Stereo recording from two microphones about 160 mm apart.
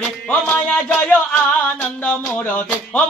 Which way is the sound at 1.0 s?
10° left (ahead or behind).